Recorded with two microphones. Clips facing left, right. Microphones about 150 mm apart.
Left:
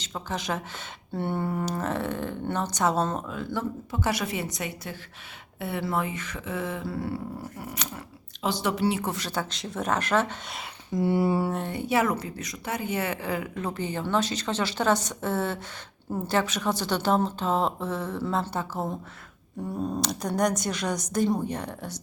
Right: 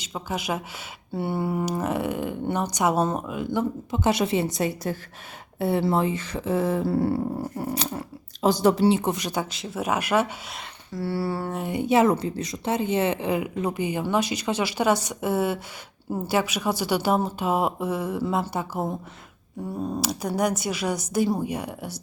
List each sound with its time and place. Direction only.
0.0 s speech: 10° right (ahead or behind)
10.9 s a sound: 20° left (ahead or behind)
11.5 s speech: 10° right (ahead or behind)